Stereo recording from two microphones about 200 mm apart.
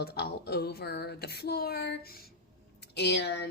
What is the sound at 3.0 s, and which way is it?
Speech, 55° left (ahead or behind).